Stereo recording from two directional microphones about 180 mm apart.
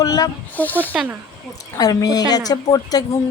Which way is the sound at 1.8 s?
20° left (ahead or behind).